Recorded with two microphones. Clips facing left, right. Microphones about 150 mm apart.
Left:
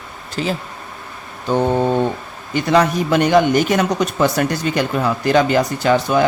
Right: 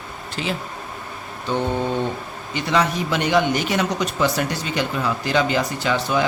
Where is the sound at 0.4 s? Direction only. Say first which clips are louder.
Left 5 dB; 40° left (ahead or behind).